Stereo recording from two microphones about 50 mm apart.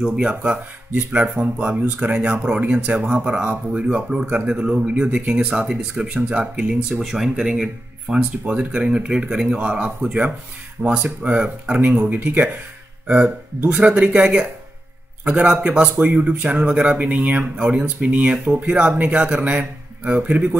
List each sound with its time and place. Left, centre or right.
0.0 s speech: centre
0.3 s speech: right; by 8.2 s centre
8.2 s speech: right
9.6 s speech: right
13.7 s speech: right
15.7 s speech: centre
18.4 s speech: right